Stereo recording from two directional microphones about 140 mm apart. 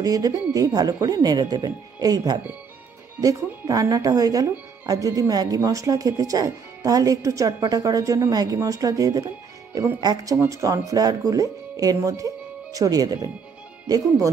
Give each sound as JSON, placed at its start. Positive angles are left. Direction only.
{"t": 0.0, "sound": "speech", "side_deg": -25}